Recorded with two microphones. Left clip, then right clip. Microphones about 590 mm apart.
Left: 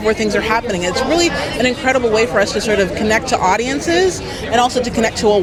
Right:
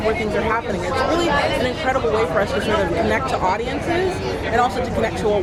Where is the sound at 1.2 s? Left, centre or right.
Left.